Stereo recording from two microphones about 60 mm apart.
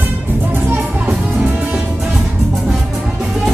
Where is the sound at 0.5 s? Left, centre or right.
Right.